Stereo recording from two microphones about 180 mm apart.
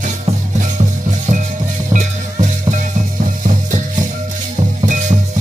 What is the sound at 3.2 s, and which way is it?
Music, 50° right (ahead or behind).